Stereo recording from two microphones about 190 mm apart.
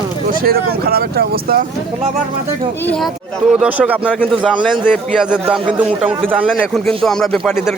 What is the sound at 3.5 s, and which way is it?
Speech, 5° right (ahead or behind).